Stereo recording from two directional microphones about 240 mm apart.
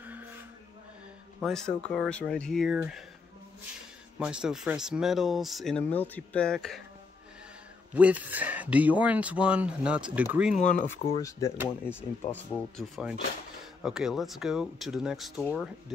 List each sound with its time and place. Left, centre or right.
1.4 s speech: centre
4.2 s speech: centre
7.9 s speech: centre
10.6 s speech: left
11.2 s speech: centre